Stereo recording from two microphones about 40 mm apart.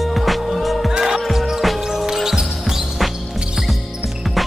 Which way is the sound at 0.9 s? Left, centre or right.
Centre.